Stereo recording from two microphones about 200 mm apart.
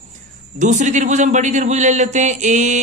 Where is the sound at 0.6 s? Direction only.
35° right (ahead or behind).